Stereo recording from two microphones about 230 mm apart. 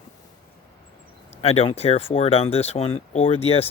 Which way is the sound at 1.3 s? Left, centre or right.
Left.